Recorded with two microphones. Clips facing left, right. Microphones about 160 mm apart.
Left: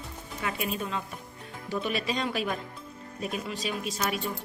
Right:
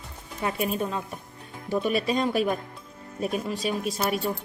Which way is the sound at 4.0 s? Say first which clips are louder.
Right 4 dB; 40° right (ahead or behind).